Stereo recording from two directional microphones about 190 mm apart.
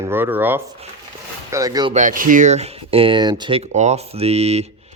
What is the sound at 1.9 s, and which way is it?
Speech, 40° right (ahead or behind).